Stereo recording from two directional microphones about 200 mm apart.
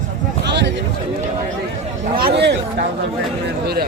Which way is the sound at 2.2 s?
55° right (ahead or behind).